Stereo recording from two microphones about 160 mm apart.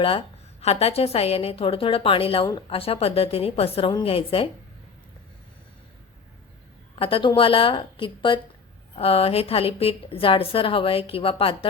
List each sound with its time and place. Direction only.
0.6 s a woman's voice: 40° left (ahead or behind)
7.0 s a woman's voice: 35° left (ahead or behind)